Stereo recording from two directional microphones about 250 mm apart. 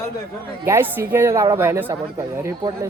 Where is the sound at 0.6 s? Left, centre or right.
Centre.